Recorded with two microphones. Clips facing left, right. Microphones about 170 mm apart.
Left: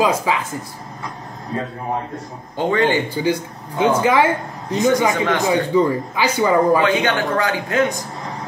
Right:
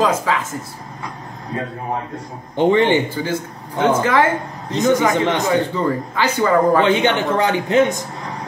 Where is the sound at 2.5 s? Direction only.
20° right (ahead or behind).